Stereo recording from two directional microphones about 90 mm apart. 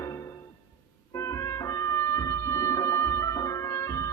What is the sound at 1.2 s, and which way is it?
Music, 35° left (ahead or behind).